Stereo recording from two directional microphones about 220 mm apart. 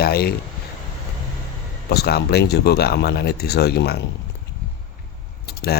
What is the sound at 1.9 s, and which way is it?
Speech, 50° left (ahead or behind).